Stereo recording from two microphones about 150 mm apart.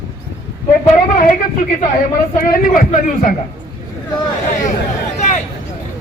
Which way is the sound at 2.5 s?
70° left (ahead or behind).